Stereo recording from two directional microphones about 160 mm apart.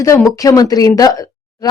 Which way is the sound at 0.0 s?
20° left (ahead or behind).